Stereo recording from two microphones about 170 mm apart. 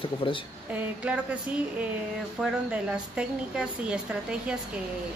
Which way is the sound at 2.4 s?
5° right (ahead or behind).